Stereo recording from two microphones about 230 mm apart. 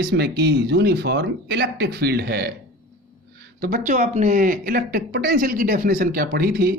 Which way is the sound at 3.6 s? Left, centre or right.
Right.